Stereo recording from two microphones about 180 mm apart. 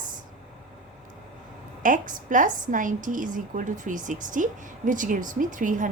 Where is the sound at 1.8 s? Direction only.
45° right (ahead or behind).